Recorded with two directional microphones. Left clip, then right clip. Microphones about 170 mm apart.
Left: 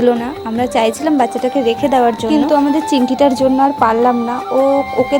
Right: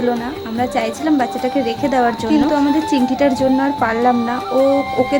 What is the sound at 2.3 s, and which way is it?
Speech, 5° left (ahead or behind).